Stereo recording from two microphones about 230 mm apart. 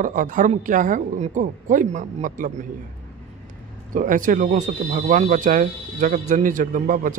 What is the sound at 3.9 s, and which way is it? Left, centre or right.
Speech, right.